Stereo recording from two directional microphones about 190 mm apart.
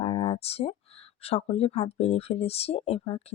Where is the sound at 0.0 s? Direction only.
30° left (ahead or behind).